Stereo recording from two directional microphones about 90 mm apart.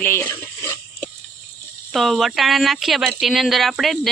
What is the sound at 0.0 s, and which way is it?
Speech, 25° left (ahead or behind).